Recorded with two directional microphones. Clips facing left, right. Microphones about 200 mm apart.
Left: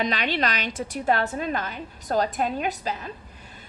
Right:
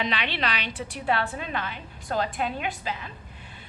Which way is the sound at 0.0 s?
45° left (ahead or behind).